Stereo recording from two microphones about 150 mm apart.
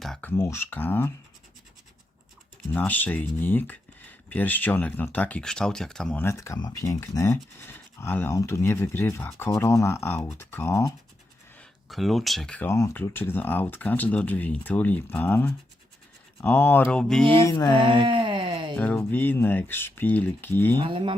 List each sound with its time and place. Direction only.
0.0 s speech: 5° left (ahead or behind)
2.7 s speech: 10° left (ahead or behind)
6.2 s speech: 20° left (ahead or behind)
11.5 s speech: centre (ahead or behind)
17.4 s mantra: 25° left (ahead or behind)
17.8 s wail: 35° right (ahead or behind)
18.8 s speech: 10° left (ahead or behind)
20.8 s speech: 35° right (ahead or behind)